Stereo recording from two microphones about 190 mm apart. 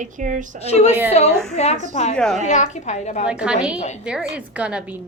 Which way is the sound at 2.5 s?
40° left (ahead or behind).